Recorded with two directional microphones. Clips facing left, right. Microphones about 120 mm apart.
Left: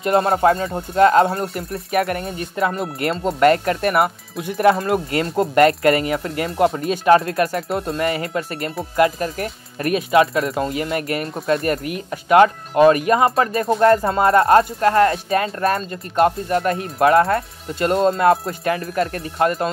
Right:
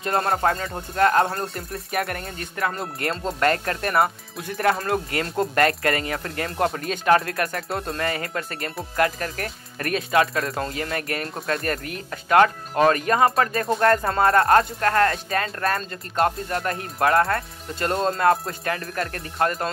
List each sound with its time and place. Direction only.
0.3 s speech: 25° left (ahead or behind)
4.0 s speech: 10° left (ahead or behind)
4.6 s speech: 25° left (ahead or behind)
7.7 s speech: 5° left (ahead or behind)
8.0 s speech: 25° left (ahead or behind)